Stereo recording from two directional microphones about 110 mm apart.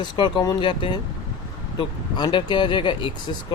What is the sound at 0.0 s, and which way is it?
Speech, 45° left (ahead or behind).